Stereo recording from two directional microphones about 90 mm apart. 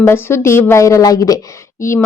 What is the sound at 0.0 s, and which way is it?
Speech, 30° left (ahead or behind).